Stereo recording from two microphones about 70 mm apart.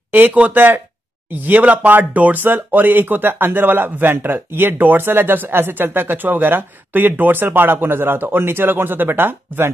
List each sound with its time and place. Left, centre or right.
0.1 s speech: right